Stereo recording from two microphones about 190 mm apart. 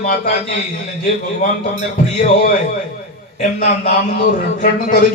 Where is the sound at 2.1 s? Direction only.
55° left (ahead or behind).